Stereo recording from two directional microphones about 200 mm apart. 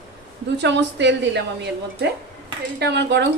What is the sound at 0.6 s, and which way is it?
Speech, 60° right (ahead or behind).